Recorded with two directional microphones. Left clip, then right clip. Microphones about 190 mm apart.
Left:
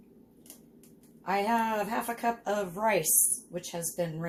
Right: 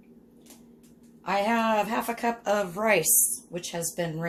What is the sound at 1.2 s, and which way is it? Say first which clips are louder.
Speech: right 3 dB; 30° right (ahead or behind).